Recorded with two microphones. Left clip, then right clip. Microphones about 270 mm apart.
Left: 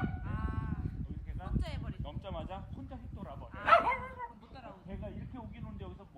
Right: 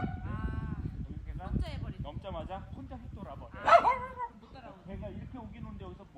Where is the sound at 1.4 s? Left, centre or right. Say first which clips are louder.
Right 1 dB; centre.